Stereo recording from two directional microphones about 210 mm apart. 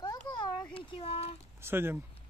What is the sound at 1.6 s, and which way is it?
Speech, 10° right (ahead or behind).